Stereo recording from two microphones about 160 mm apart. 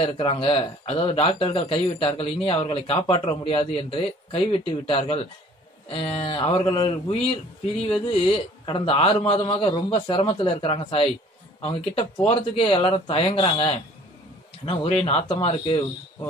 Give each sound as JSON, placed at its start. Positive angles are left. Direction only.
{"t": 0.0, "sound": "speech", "side_deg": 35}
{"t": 8.3, "sound": "speech", "side_deg": 35}